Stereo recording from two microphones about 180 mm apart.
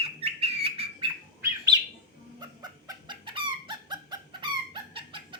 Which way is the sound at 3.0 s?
25° right (ahead or behind).